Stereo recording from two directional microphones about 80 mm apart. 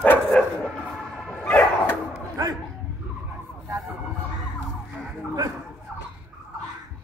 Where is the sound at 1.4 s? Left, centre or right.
Left.